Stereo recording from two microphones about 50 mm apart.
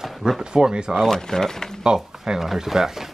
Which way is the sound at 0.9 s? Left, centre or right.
Centre.